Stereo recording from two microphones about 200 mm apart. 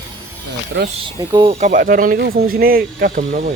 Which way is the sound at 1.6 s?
45° right (ahead or behind).